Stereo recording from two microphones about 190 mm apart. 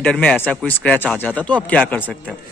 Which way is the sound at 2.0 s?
5° right (ahead or behind).